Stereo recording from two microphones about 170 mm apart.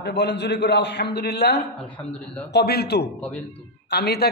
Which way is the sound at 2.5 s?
70° left (ahead or behind).